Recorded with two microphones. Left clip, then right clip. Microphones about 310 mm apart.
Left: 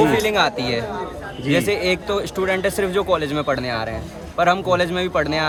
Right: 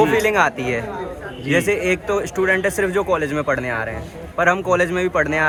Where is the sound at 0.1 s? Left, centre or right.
Centre.